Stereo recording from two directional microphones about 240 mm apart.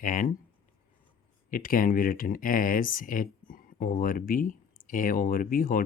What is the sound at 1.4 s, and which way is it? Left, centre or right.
Speech, left.